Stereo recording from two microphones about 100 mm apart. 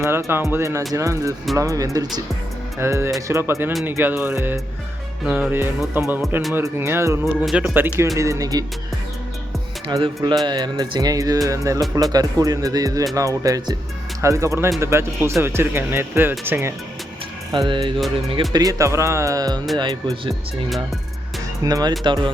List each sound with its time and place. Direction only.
0.0 s speech: 25° right (ahead or behind)
5.2 s speech: 10° right (ahead or behind)
5.5 s speech: 20° right (ahead or behind)
7.5 s speech: 15° right (ahead or behind)
8.0 s speech: 30° right (ahead or behind)
9.9 s speech: 45° right (ahead or behind); by 16.7 s 25° right (ahead or behind)
17.7 s music: 55° right (ahead or behind)
18.5 s speech: 35° right (ahead or behind)
21.6 s speech: 40° right (ahead or behind)
22.0 s speech: 50° right (ahead or behind)